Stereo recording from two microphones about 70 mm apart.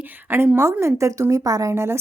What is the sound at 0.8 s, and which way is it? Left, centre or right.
Speech, right.